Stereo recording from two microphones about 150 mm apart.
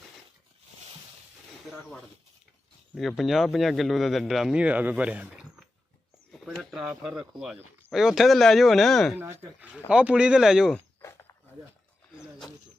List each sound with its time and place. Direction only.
2.9 s a man's voice: centre (ahead or behind)
9.1 s speech: 15° right (ahead or behind)
11.0 s a sound: 15° left (ahead or behind)